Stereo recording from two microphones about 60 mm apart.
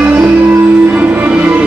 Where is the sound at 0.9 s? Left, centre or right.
Right.